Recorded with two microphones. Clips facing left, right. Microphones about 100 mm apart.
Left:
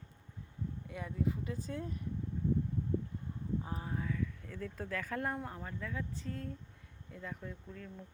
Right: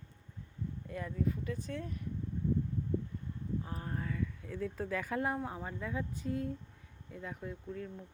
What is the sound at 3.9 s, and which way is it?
Speech, centre (ahead or behind).